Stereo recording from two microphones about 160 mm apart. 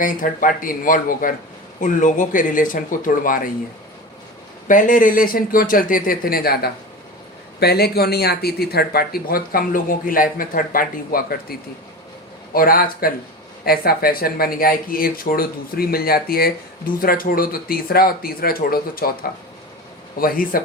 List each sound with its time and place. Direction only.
0.0 s speech: 55° left (ahead or behind)
4.7 s speech: 55° left (ahead or behind); by 6.7 s 70° left (ahead or behind)
7.6 s speech: 80° left
12.5 s speech: 65° left (ahead or behind)
20.1 s speech: 65° left (ahead or behind)